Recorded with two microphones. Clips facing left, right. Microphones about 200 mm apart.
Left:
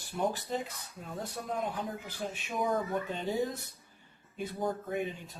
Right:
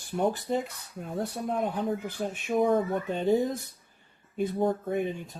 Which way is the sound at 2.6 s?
25° right (ahead or behind).